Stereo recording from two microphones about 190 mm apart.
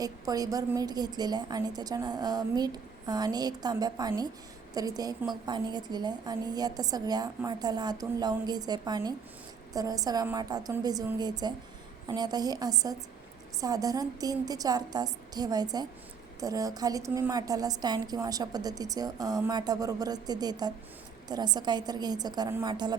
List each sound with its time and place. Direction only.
0.0 s a woman's voice: 20° right (ahead or behind)